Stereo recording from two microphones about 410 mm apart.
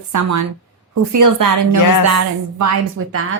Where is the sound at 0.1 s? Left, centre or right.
Right.